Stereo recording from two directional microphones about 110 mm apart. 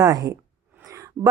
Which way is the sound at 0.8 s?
30° right (ahead or behind).